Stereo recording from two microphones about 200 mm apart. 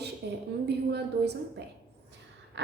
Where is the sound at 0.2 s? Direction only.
60° right (ahead or behind).